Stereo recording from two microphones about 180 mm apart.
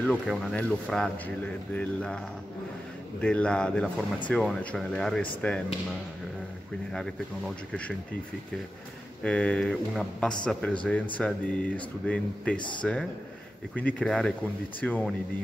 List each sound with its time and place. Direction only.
0.0 s speech: 5° left (ahead or behind)
3.2 s speech: 5° left (ahead or behind)
6.9 s speech: 5° left (ahead or behind)
9.2 s speech: 5° left (ahead or behind)
12.5 s speech: 25° left (ahead or behind)
13.7 s speech: 10° left (ahead or behind)